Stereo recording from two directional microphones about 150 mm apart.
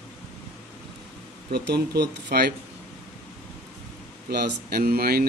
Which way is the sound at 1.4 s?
90° right.